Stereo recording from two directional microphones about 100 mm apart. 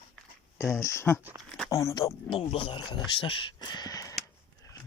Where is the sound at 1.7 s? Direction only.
35° left (ahead or behind).